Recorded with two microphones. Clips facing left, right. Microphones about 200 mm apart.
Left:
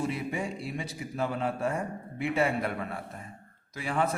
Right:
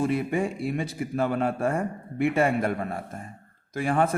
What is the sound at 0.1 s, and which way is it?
A man's voice, 55° right (ahead or behind).